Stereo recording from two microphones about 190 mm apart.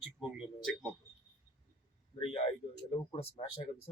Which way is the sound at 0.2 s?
5° right (ahead or behind).